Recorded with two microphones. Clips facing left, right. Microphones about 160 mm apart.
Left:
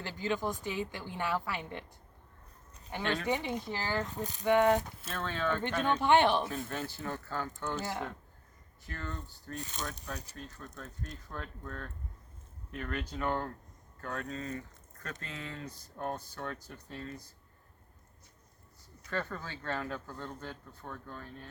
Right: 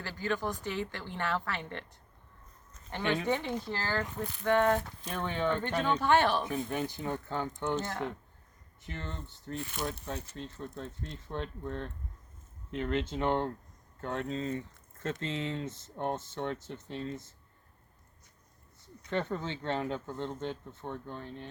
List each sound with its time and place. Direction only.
0.0 s a woman's voice: 15° left (ahead or behind)
3.0 s speech: 15° right (ahead or behind)
3.2 s a woman's voice: 15° left (ahead or behind)
5.0 s speech: 15° right (ahead or behind)
6.0 s a woman's voice: 15° left (ahead or behind)
6.4 s speech: 15° right (ahead or behind)
7.8 s a woman's voice: 15° left (ahead or behind)
8.8 s speech: 20° right (ahead or behind)
19.0 s speech: 20° right (ahead or behind)